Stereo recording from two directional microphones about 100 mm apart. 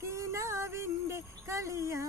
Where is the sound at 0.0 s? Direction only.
30° right (ahead or behind).